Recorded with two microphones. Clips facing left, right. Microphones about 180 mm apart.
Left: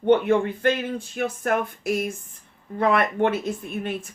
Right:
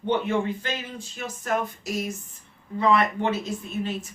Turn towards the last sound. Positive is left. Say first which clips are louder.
# left 1 dB
turn(degrees=55)  # may be behind; listen again after turning